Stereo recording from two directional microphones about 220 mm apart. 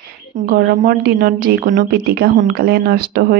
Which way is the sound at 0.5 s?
45° right (ahead or behind).